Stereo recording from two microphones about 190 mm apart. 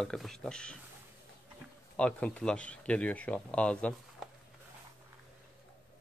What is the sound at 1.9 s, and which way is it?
Speech, 5° left (ahead or behind).